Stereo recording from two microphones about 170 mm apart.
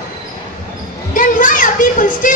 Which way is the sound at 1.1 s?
50° left (ahead or behind).